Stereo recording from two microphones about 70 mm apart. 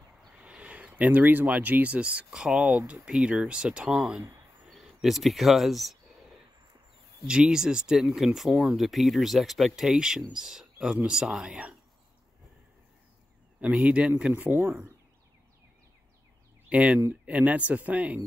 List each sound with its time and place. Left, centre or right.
0.4 s speech: centre
7.2 s speech: centre
13.6 s speech: centre
16.6 s speech: centre